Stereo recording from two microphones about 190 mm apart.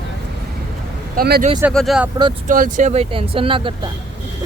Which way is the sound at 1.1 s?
50° right (ahead or behind).